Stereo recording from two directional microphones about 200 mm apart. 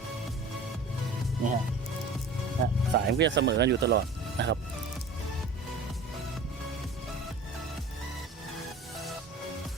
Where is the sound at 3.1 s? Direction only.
60° right (ahead or behind).